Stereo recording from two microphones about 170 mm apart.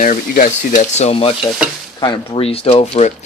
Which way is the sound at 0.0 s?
50° left (ahead or behind).